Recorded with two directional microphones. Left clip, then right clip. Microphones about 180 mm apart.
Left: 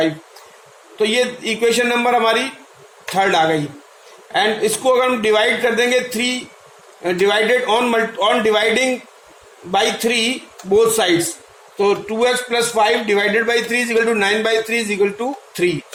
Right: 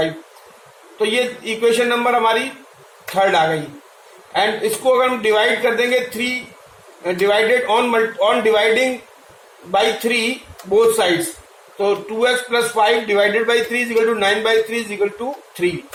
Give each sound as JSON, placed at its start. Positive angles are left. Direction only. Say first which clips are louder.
{"t": 0.9, "sound": "a man's voice", "louder": "left 1 dB", "side_deg": 65}
{"t": 4.4, "sound": "a man's voice", "louder": "left 1 dB", "side_deg": 65}